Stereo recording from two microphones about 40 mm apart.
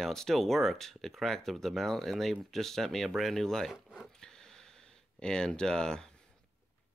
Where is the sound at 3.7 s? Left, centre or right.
Centre.